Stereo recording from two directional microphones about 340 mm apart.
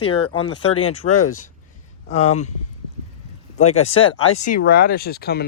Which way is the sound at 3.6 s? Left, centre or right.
Left.